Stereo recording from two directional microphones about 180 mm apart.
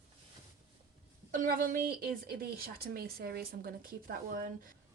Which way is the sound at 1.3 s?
50° right (ahead or behind).